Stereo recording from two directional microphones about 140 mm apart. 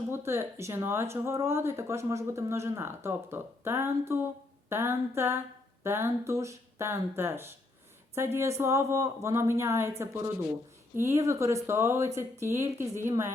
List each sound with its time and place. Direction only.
0.1 s speech: 20° right (ahead or behind)
4.7 s a sound: 15° right (ahead or behind)
5.8 s speech: 20° right (ahead or behind)